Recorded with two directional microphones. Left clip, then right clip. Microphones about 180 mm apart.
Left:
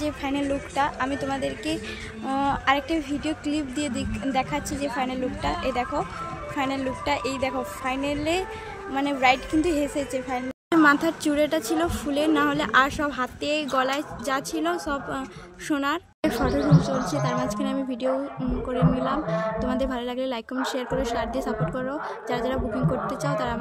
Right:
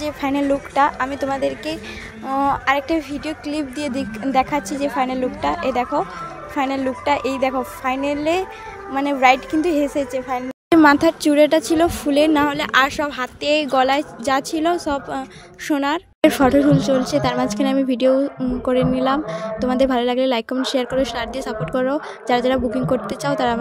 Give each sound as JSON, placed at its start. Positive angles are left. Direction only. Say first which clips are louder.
{"t": 0.0, "sound": "speech", "louder": "right 6 dB", "side_deg": -25}
{"t": 2.2, "sound": "speech", "louder": "right 5 dB", "side_deg": -10}
{"t": 10.7, "sound": "speech", "louder": "right 6 dB", "side_deg": -35}